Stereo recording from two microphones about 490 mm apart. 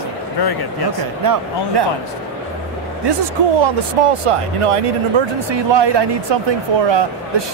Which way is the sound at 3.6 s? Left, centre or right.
Right.